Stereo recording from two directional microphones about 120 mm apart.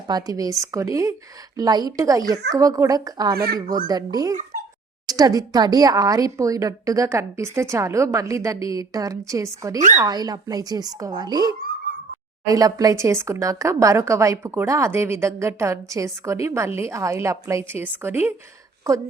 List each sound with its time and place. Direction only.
0.1 s speech: 30° right (ahead or behind)